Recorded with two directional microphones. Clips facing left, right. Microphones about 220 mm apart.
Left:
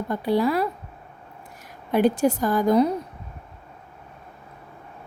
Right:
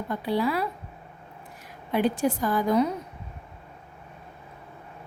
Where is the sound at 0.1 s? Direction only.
45° left (ahead or behind).